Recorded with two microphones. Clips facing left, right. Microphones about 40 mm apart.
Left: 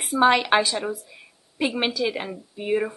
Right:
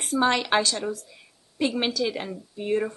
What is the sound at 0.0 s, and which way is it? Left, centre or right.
A woman's voice, centre.